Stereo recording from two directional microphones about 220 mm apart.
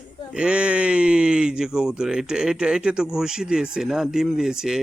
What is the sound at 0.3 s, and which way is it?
Speech, 5° right (ahead or behind).